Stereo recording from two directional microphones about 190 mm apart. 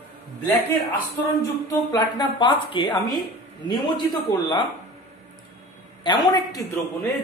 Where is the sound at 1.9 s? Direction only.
25° left (ahead or behind).